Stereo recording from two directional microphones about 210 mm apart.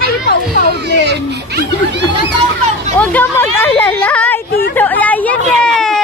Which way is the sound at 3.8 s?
5° left (ahead or behind).